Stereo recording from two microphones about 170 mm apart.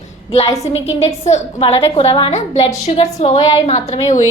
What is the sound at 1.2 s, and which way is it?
A woman's voice, 40° left (ahead or behind).